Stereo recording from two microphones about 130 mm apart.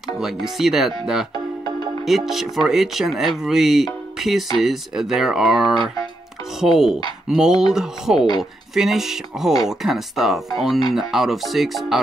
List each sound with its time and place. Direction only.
0.2 s speech: centre (ahead or behind)